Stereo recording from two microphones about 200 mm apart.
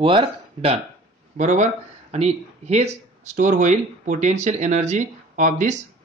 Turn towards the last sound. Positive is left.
turn(degrees=-40)  # may be behind; listen again after turning